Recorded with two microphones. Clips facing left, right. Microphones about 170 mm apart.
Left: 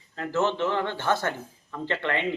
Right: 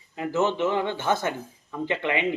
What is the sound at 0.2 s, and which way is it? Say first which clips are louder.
Speech: right 2 dB; 15° right (ahead or behind).